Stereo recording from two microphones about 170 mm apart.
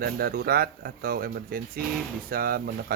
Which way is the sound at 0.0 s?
65° right (ahead or behind).